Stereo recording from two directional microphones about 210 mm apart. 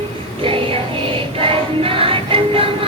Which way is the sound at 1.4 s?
25° right (ahead or behind).